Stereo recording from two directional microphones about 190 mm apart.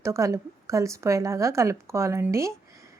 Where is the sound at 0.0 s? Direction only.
15° right (ahead or behind).